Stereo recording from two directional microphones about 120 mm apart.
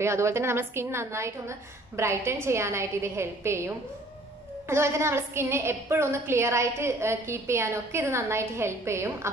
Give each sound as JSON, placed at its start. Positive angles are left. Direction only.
{"t": 0.0, "sound": "a woman's voice", "side_deg": -20}